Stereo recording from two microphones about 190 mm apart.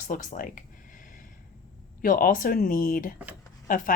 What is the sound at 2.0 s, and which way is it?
Speech, 45° left (ahead or behind).